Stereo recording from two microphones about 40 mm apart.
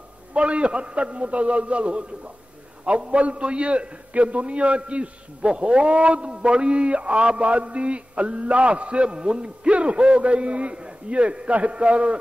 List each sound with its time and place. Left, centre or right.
0.3 s a man's voice: right